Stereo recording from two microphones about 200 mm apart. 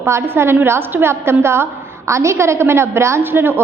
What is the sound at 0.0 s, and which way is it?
A woman's voice, 10° right (ahead or behind).